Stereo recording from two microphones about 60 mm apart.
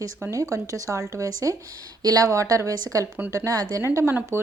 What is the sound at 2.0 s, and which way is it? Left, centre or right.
Speech, right.